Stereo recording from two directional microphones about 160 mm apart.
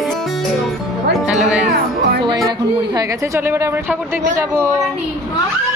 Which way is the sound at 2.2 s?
25° right (ahead or behind).